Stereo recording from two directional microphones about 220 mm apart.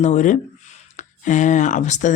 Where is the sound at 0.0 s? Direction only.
35° left (ahead or behind).